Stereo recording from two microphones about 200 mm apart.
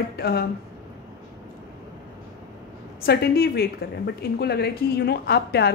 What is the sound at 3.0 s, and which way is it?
A woman's voice, 50° left (ahead or behind).